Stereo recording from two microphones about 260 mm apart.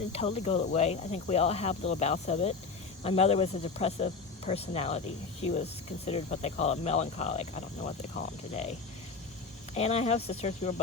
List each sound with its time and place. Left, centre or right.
0.1 s speech: left
9.7 s speech: left